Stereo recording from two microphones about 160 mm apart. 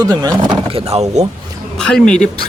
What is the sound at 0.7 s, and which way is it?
Speech, 40° right (ahead or behind).